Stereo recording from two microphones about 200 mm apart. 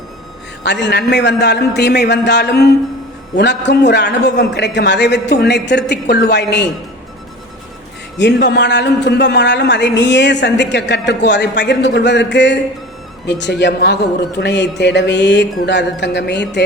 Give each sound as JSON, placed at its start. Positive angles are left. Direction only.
{"t": 0.6, "sound": "a woman's voice", "side_deg": 60}
{"t": 8.2, "sound": "a woman's voice", "side_deg": 60}